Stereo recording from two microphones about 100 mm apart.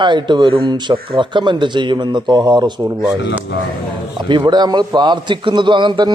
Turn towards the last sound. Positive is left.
turn(degrees=-50)  # may be behind; listen again after turning